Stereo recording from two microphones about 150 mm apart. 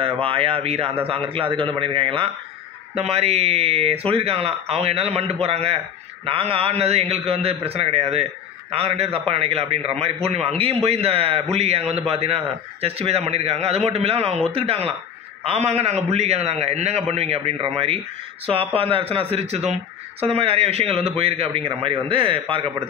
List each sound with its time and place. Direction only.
0.0 s a man's voice: 35° right (ahead or behind)